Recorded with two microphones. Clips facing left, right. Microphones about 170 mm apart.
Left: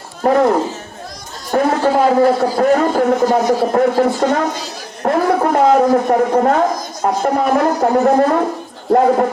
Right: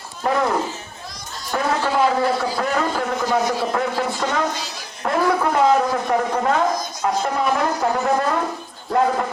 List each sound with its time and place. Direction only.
0.2 s a man's voice: 45° left (ahead or behind)
8.1 s a woman's voice: 55° left (ahead or behind)